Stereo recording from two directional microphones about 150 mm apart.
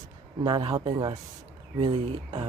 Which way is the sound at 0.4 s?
35° right (ahead or behind).